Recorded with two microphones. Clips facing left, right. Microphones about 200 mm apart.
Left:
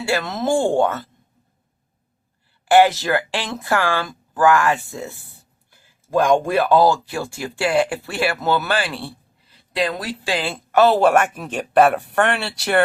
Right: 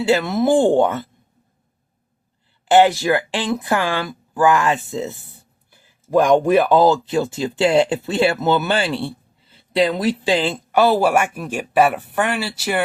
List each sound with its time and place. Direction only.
0.0 s speech: 15° right (ahead or behind)
2.6 s speech: 20° right (ahead or behind)
9.0 s a sound: 25° right (ahead or behind)
10.7 s speech: 10° right (ahead or behind)